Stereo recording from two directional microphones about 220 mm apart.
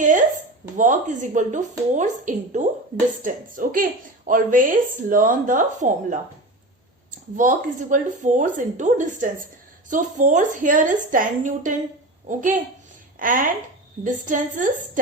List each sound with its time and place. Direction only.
0.0 s a sound: 35° right (ahead or behind)
0.8 s speech: 35° right (ahead or behind)
7.3 s speech: 35° right (ahead or behind)